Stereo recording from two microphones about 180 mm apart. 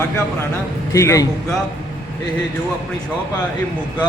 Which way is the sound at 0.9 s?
15° left (ahead or behind).